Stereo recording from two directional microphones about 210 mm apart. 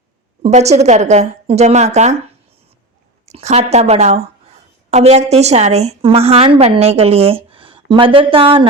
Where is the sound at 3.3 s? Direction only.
30° right (ahead or behind).